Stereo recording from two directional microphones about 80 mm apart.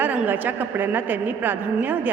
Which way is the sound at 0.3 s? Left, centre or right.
Right.